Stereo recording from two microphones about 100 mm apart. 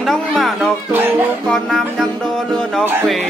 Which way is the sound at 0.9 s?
20° right (ahead or behind).